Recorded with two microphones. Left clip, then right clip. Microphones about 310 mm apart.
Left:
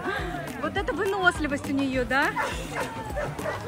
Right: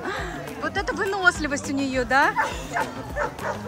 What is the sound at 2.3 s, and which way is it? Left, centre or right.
Speech, right.